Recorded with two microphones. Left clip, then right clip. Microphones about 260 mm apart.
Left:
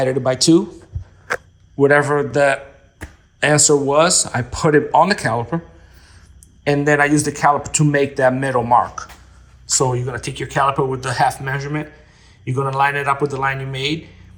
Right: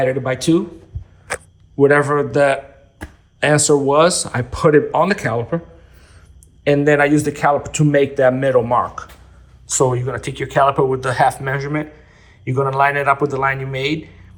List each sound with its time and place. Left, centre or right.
0.0 s speech: centre
1.8 s speech: centre
6.7 s speech: centre